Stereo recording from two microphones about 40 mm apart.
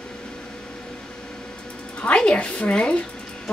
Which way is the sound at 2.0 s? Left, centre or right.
Left.